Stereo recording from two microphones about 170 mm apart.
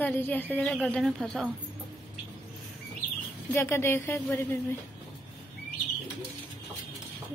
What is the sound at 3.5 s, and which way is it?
A woman's voice, 15° left (ahead or behind).